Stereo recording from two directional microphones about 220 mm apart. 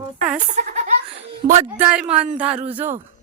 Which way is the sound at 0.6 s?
30° right (ahead or behind).